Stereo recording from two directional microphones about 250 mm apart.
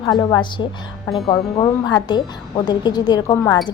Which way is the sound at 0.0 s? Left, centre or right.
Centre.